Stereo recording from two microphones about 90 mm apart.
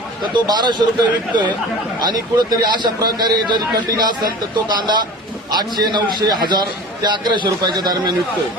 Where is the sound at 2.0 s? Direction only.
45° right (ahead or behind).